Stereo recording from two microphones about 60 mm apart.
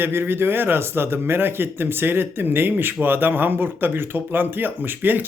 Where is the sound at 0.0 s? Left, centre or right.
Right.